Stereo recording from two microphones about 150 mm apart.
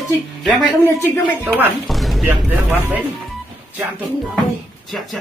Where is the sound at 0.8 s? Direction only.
15° left (ahead or behind).